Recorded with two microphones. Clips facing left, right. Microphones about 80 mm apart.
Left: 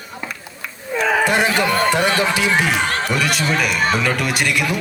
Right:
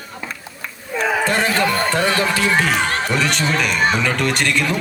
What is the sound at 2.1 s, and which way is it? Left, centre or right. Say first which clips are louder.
A man's voice: even; centre.